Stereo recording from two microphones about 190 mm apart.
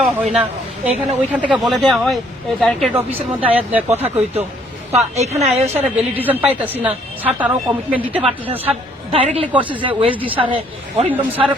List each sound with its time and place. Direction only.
0.0 s a man's voice: centre (ahead or behind)
3.1 s a woman's voice: 30° right (ahead or behind)
6.0 s a woman's voice: 10° right (ahead or behind)
9.1 s a woman's voice: 30° right (ahead or behind)
11.1 s a woman's voice: 10° right (ahead or behind)